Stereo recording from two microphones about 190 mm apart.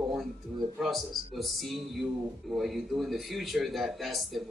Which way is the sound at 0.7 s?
Centre (ahead or behind).